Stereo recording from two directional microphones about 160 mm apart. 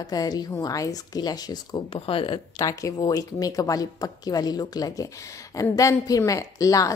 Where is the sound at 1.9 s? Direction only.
35° left (ahead or behind).